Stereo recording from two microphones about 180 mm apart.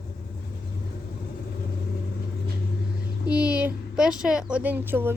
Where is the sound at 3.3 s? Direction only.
5° right (ahead or behind).